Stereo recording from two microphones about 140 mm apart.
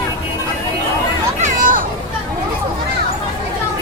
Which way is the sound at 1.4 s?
75° right (ahead or behind).